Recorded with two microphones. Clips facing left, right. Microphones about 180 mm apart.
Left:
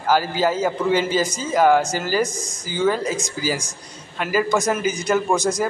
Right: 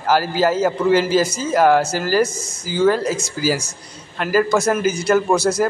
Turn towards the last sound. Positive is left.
turn(degrees=15)  # may be behind; listen again after turning